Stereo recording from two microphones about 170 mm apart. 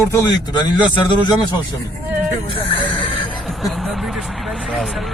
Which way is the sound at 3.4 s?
Centre (ahead or behind).